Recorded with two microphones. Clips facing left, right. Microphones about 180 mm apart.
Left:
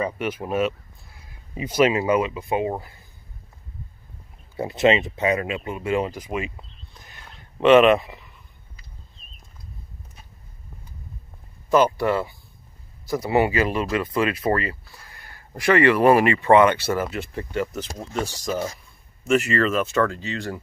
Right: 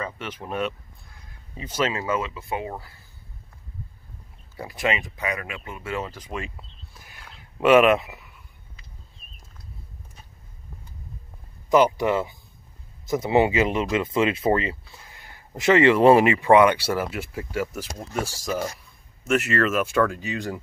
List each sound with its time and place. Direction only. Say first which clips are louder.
0.0 s speech: left 7 dB; 10° left (ahead or behind)
4.6 s speech: left 8 dB; 25° left (ahead or behind); by 6.6 s 5° left (ahead or behind)
6.9 s a sound: left 1 dB; 5° right (ahead or behind)
11.7 s speech: even; 15° right (ahead or behind)